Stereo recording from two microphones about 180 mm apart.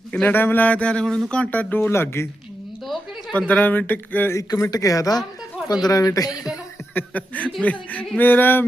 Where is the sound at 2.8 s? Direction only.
Centre (ahead or behind).